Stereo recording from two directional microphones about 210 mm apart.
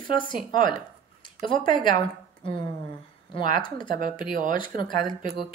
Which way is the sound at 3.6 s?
25° left (ahead or behind).